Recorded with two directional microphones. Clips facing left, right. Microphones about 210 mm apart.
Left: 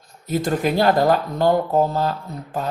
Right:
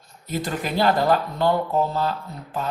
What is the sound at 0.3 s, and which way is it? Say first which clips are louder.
Speech: left 6 dB; 45° left (ahead or behind).